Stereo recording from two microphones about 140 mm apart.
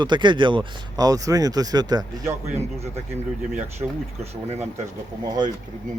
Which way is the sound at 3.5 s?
50° right (ahead or behind).